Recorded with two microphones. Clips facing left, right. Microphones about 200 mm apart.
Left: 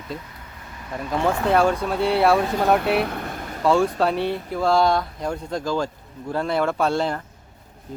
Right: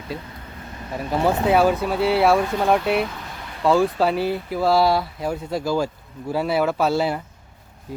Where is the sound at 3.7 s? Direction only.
Centre (ahead or behind).